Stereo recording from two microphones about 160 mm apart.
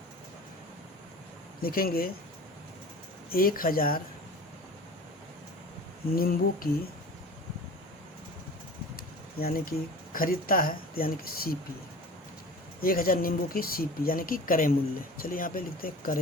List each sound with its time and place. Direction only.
1.6 s speech: 65° left (ahead or behind)
3.2 s speech: 65° left (ahead or behind)
6.1 s speech: 65° left (ahead or behind)
9.0 s speech: 70° left (ahead or behind)
12.8 s speech: 65° left (ahead or behind)